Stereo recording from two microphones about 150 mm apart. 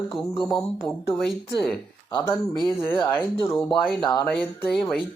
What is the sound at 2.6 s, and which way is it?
Speech, 15° left (ahead or behind).